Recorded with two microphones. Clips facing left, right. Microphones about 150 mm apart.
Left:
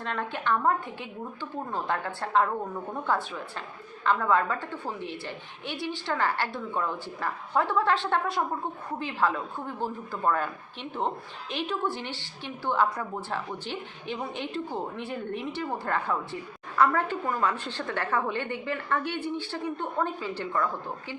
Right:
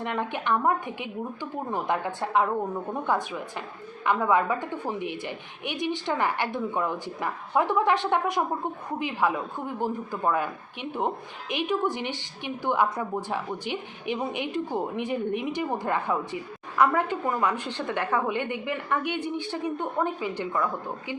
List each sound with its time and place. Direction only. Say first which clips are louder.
0.0 s a woman's voice: right 2 dB; 15° right (ahead or behind)